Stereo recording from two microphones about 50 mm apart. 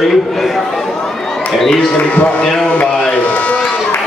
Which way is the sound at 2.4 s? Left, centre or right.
Centre.